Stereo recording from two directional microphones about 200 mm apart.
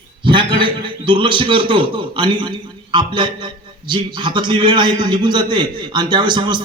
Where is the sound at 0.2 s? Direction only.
25° right (ahead or behind).